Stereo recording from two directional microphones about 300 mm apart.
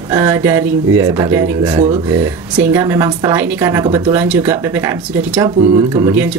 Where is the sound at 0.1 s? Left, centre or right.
Centre.